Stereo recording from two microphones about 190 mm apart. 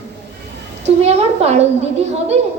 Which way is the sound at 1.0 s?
35° right (ahead or behind).